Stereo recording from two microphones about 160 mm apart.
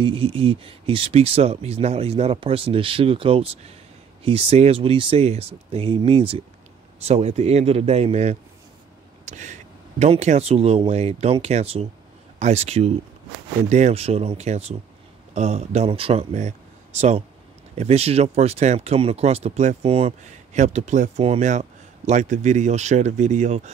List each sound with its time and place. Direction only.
0.0 s speech: 35° right (ahead or behind)